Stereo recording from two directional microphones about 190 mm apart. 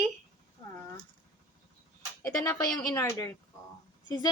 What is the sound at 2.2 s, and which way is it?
A woman's voice, 15° left (ahead or behind).